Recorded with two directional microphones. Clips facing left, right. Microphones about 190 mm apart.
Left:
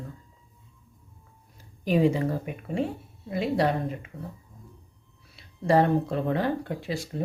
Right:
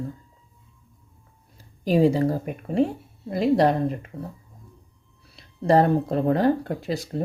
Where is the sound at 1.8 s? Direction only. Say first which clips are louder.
Right 4 dB; 35° right (ahead or behind).